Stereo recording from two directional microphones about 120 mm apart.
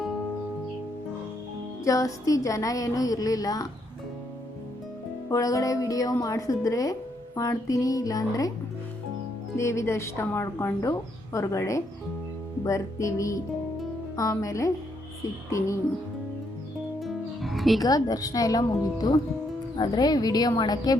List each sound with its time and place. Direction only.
1.8 s a woman's voice: 25° left (ahead or behind)
5.3 s a woman's voice: 30° left (ahead or behind)
9.6 s a woman's voice: 25° left (ahead or behind)
17.0 s music: centre (ahead or behind)
17.7 s a woman's voice: 30° left (ahead or behind)